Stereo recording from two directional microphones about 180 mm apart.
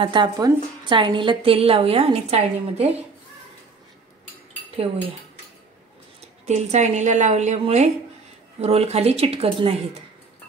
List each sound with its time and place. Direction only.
0.0 s a woman's voice: 25° right (ahead or behind)
6.4 s a woman's voice: 40° right (ahead or behind)